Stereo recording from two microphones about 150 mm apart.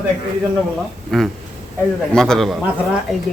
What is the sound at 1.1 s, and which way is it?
Speech, 5° left (ahead or behind).